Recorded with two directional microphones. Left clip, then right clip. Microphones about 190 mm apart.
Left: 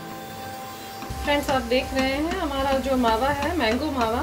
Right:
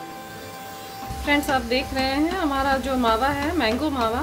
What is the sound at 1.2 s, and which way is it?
A woman's voice, 15° right (ahead or behind).